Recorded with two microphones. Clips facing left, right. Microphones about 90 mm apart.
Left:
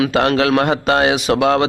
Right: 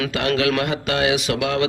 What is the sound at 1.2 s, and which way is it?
Speech, 30° left (ahead or behind).